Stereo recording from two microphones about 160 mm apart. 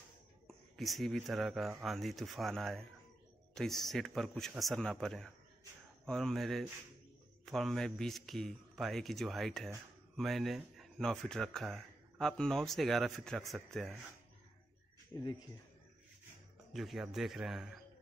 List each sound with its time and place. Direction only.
0.5 s speech: centre (ahead or behind)
16.7 s speech: centre (ahead or behind)